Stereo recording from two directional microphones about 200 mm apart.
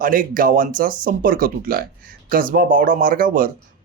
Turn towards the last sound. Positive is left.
turn(degrees=-45)  # may be behind; listen again after turning